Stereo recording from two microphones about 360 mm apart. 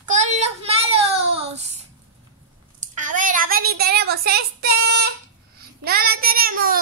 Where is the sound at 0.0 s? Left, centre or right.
Centre.